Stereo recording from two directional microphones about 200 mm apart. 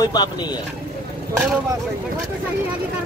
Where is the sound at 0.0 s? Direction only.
20° left (ahead or behind).